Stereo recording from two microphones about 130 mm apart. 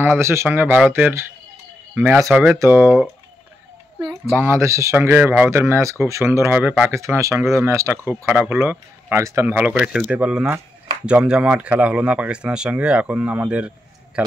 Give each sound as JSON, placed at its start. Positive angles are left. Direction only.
{"t": 0.0, "sound": "speech", "side_deg": -20}
{"t": 4.4, "sound": "speech", "side_deg": -20}